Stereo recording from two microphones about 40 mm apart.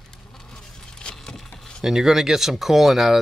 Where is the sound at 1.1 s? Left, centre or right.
Centre.